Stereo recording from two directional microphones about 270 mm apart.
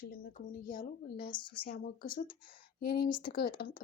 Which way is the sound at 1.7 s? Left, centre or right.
Left.